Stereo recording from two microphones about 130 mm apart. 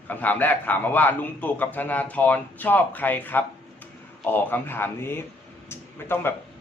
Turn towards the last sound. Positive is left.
turn(degrees=15)  # may be behind; listen again after turning